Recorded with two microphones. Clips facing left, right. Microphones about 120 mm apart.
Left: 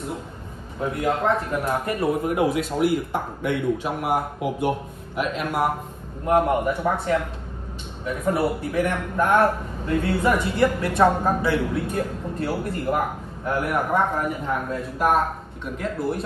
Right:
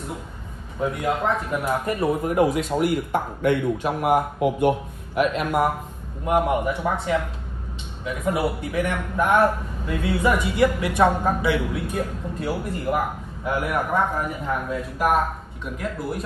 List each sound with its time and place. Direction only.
0.7 s a man's voice: centre (ahead or behind)
2.9 s speech: 55° right (ahead or behind)
3.8 s a man's voice: centre (ahead or behind)
8.2 s a man's voice: 5° right (ahead or behind)